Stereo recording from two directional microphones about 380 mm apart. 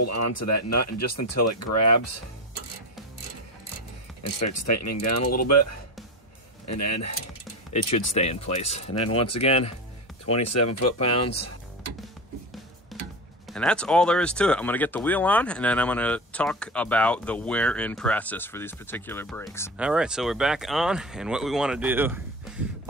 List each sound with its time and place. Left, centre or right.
0.0 s speech: left
4.2 s speech: left
6.7 s speech: left
8.1 s speech: centre
10.5 s speech: left
13.5 s speech: centre